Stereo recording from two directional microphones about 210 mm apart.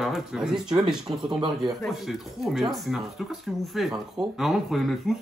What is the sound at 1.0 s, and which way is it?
Speech, 20° right (ahead or behind).